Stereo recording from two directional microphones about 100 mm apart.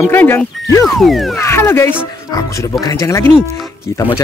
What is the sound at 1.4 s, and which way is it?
Speech, 25° left (ahead or behind).